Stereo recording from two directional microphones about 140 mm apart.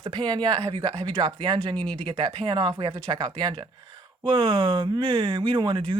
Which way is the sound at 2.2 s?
35° right (ahead or behind).